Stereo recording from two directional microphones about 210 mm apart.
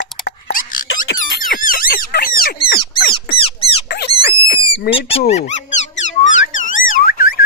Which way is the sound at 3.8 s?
55° left (ahead or behind).